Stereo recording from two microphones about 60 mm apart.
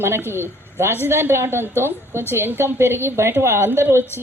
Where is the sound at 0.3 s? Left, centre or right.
Right.